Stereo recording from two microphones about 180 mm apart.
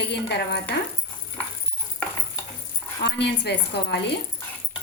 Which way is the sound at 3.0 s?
70° left (ahead or behind).